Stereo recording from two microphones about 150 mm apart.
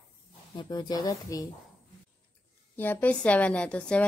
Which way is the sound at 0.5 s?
30° left (ahead or behind).